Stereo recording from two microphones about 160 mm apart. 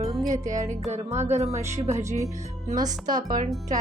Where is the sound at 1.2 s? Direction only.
45° right (ahead or behind).